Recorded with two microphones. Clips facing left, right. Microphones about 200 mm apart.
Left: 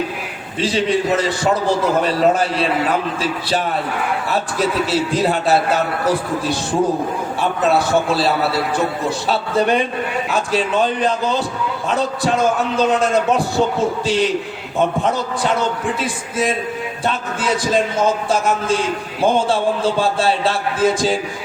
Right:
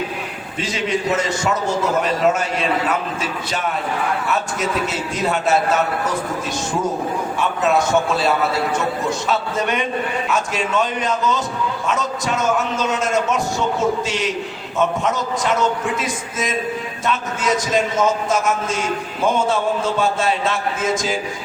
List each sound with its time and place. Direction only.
0.6 s a man's voice: 35° left (ahead or behind)